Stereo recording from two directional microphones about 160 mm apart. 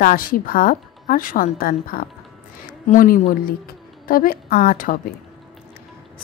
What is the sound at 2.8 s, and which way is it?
Speech, 55° left (ahead or behind).